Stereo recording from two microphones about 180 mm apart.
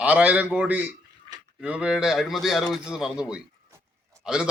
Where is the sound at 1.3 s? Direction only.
25° right (ahead or behind).